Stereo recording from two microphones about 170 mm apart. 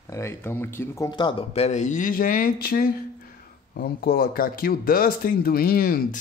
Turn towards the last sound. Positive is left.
turn(degrees=60)  # may be behind; listen again after turning